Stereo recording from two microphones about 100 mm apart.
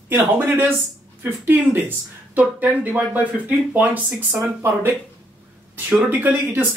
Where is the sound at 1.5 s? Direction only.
20° right (ahead or behind).